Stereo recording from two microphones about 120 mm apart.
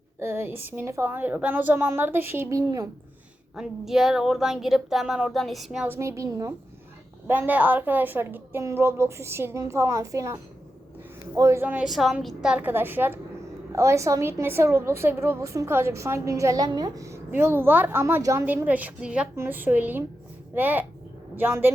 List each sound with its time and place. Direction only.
0.2 s a woman's voice: 20° right (ahead or behind)
2.5 s a woman's voice: 30° right (ahead or behind)
3.5 s speech: 5° right (ahead or behind)
5.9 s a woman's voice: 25° right (ahead or behind)
7.3 s a woman's voice: 15° right (ahead or behind)
11.6 s a woman's voice: 15° right (ahead or behind)
11.9 s speech: centre (ahead or behind)
12.5 s a woman's voice: 15° right (ahead or behind)
17.3 s a woman's voice: 20° right (ahead or behind)
18.4 s a woman's voice: 15° right (ahead or behind)